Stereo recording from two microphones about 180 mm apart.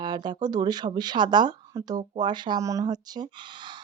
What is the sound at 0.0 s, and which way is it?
Speech, 25° right (ahead or behind).